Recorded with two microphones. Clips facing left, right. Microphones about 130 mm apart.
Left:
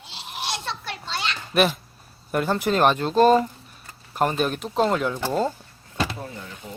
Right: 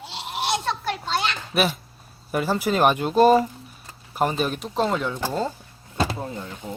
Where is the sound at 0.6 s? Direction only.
50° right (ahead or behind).